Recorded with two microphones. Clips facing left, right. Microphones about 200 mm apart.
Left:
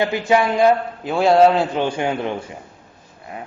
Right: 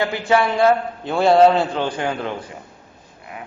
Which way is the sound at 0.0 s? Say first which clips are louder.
Left 1 dB; 15° left (ahead or behind).